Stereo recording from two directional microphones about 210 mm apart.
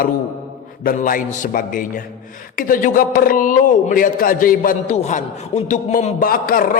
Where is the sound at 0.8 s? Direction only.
40° left (ahead or behind).